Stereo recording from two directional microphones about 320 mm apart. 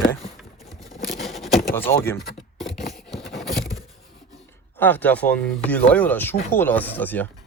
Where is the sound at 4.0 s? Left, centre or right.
Left.